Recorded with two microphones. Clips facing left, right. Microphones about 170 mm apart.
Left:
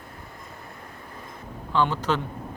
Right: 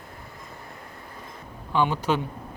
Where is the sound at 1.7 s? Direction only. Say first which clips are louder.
Even; 15° right (ahead or behind).